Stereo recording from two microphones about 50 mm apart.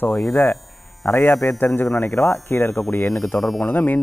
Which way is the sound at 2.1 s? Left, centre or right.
Left.